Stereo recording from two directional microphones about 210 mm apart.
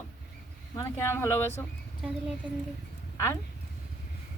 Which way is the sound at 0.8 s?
10° left (ahead or behind).